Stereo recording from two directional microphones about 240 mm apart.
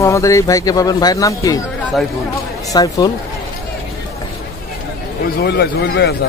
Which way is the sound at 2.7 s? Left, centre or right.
Centre.